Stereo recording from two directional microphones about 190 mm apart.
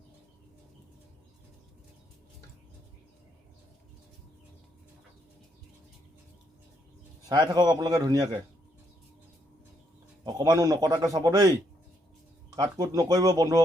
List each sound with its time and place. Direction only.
7.3 s a man's voice: 20° right (ahead or behind)
10.2 s a man's voice: 20° right (ahead or behind)
12.5 s a man's voice: 20° right (ahead or behind)